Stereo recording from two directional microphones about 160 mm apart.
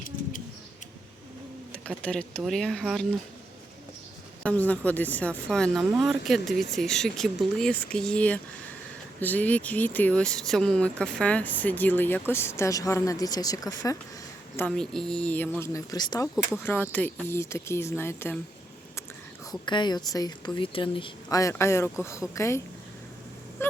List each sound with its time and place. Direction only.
1.7 s speech: 10° left (ahead or behind)
4.4 s speech: 10° left (ahead or behind)
14.7 s speech: 5° left (ahead or behind); by 16.3 s 25° left (ahead or behind)
16.6 s speech: 10° left (ahead or behind)
19.5 s a woman's voice: 30° left (ahead or behind)